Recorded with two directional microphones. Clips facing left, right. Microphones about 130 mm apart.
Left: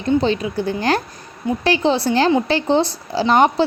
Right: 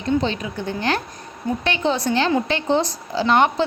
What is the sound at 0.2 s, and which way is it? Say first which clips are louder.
A woman's voice: left 5 dB; 35° left (ahead or behind).